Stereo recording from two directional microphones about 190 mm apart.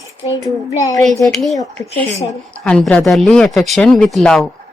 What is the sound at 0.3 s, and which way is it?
Speech, 15° left (ahead or behind).